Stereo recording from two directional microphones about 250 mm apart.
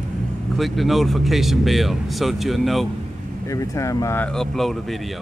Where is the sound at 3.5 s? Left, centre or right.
Centre.